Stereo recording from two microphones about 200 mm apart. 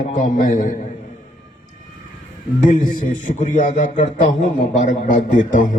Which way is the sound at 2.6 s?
40° left (ahead or behind).